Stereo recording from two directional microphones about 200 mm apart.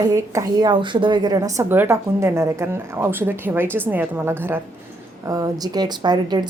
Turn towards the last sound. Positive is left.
turn(degrees=-20)  # may be behind; listen again after turning